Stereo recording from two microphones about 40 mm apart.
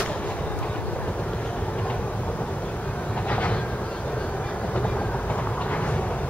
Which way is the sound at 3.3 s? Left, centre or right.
Left.